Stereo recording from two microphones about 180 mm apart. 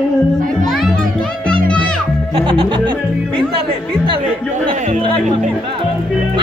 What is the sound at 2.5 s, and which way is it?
Speech, 25° right (ahead or behind).